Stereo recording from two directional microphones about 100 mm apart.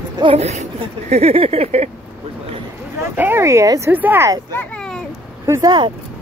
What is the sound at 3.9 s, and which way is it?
Speech, 20° right (ahead or behind).